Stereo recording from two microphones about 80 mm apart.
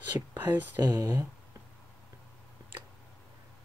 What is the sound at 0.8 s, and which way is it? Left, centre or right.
Speech, right.